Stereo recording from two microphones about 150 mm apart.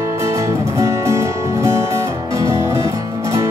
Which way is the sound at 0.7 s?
20° right (ahead or behind).